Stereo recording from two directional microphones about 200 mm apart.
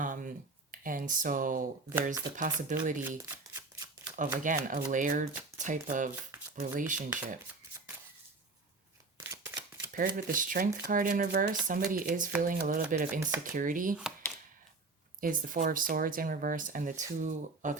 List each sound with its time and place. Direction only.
0.0 s speech: 40° right (ahead or behind)
3.2 s shuffling cards: 15° right (ahead or behind)
4.2 s speech: 40° right (ahead or behind)
9.2 s shuffling cards: 10° right (ahead or behind)
9.9 s speech: 40° right (ahead or behind)
15.2 s speech: 45° right (ahead or behind)